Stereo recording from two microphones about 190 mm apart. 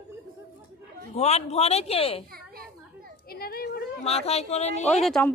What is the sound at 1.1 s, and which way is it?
Speech, 35° left (ahead or behind).